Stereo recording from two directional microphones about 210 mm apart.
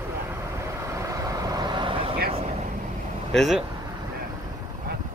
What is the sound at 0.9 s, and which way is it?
Vehicle, 15° right (ahead or behind).